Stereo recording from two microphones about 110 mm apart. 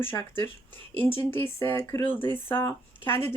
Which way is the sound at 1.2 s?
20° left (ahead or behind).